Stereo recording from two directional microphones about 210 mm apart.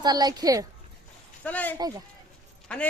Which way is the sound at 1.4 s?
5° left (ahead or behind).